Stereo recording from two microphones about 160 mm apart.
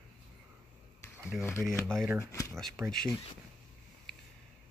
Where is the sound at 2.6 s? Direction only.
Centre (ahead or behind).